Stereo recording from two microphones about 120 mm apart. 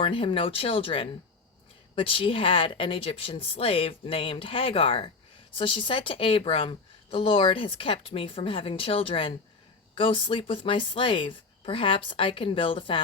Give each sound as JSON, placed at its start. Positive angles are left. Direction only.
{"t": 0.0, "sound": "speech", "side_deg": 45}